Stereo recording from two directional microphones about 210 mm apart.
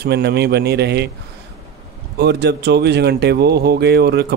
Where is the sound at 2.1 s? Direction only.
50° right (ahead or behind).